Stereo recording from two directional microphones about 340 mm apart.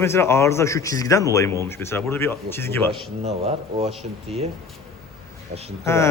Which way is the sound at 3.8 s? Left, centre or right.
Centre.